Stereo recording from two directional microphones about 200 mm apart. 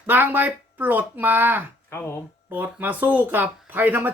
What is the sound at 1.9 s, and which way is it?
Speech, 10° left (ahead or behind).